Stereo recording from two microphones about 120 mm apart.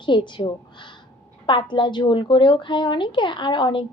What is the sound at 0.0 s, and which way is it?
Speech, 40° left (ahead or behind).